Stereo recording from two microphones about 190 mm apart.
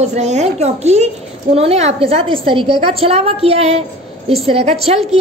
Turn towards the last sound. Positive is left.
turn(degrees=-35)  # may be behind; listen again after turning